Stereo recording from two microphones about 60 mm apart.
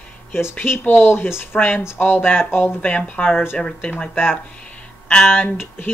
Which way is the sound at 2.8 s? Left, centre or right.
Left.